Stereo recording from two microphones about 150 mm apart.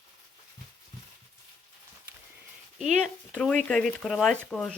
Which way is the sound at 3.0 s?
5° left (ahead or behind).